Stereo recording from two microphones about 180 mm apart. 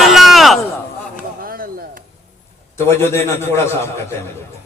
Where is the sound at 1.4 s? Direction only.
55° right (ahead or behind).